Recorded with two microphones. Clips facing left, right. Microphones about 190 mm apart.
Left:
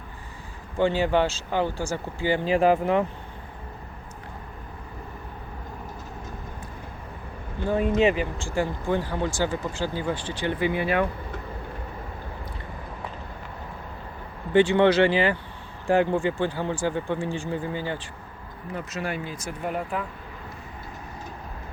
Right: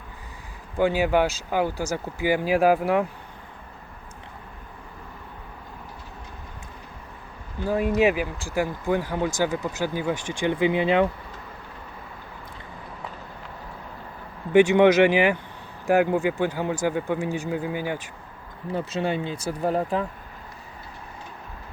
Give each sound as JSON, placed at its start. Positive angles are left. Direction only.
{"t": 0.8, "sound": "speech", "side_deg": -10}
{"t": 7.6, "sound": "speech", "side_deg": -5}
{"t": 14.5, "sound": "speech", "side_deg": -10}
{"t": 18.7, "sound": "speech", "side_deg": -30}